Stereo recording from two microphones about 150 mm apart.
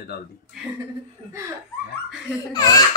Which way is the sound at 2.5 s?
25° left (ahead or behind).